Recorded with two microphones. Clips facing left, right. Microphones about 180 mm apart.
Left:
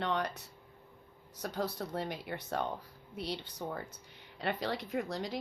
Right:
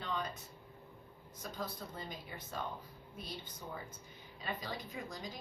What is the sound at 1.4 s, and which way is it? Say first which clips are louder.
Speech: left 7 dB; 70° left (ahead or behind).